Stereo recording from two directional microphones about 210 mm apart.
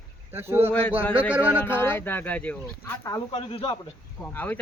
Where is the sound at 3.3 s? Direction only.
25° left (ahead or behind).